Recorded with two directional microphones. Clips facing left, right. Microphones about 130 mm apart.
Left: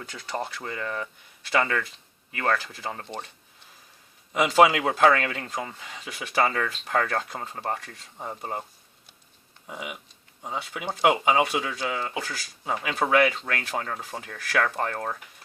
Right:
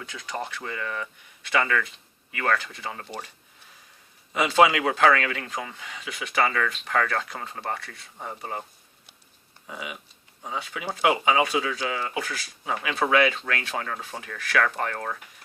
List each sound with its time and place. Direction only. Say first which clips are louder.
0.0 s speech: left 1 dB; 35° left (ahead or behind)
4.9 s speech: even; 30° left (ahead or behind)
9.6 s speech: even; 20° left (ahead or behind)